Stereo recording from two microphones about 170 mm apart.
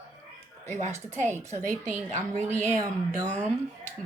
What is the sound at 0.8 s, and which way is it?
A woman's voice, 45° right (ahead or behind).